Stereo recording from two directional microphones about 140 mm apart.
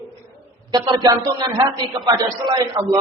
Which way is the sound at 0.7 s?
30° right (ahead or behind).